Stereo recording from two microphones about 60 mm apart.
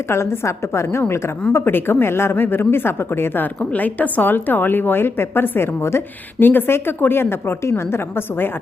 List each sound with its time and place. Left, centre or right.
0.1 s a woman's voice: left
3.6 s a woman's voice: left